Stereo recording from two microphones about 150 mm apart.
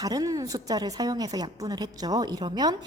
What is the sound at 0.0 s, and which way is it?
Speech, 25° right (ahead or behind).